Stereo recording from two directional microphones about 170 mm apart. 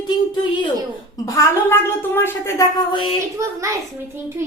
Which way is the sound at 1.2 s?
20° left (ahead or behind).